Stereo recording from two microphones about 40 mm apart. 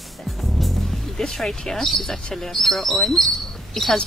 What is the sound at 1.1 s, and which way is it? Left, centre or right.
Speech, centre.